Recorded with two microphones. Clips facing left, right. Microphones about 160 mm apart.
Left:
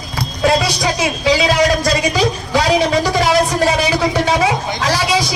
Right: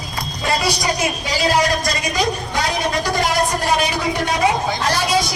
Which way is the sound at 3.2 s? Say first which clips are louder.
Left 5 dB; 80° left.